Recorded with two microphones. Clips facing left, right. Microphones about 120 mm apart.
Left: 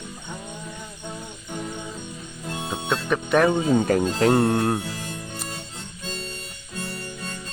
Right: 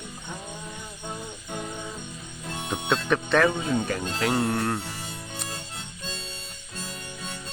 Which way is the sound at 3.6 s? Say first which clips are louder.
Left 7 dB; 45° left (ahead or behind).